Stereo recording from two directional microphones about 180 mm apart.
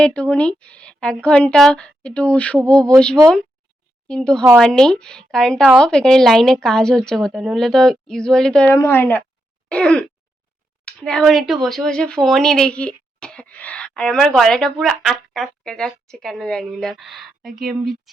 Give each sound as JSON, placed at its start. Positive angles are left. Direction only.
{"t": 0.0, "sound": "a woman's voice", "side_deg": 5}
{"t": 4.1, "sound": "a woman's voice", "side_deg": 5}
{"t": 9.6, "sound": "a sound", "side_deg": 5}
{"t": 10.8, "sound": "a woman's voice", "side_deg": 5}